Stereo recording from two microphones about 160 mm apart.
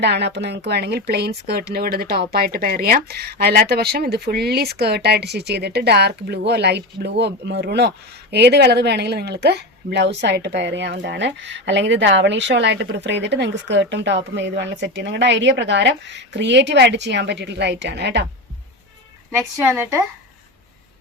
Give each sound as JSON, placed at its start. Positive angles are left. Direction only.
{"t": 0.0, "sound": "speech", "side_deg": -90}
{"t": 19.6, "sound": "speech", "side_deg": -15}